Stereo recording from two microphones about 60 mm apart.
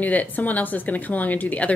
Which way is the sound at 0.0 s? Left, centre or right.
Left.